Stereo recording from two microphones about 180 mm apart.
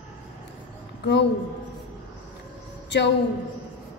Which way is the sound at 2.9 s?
75° left (ahead or behind).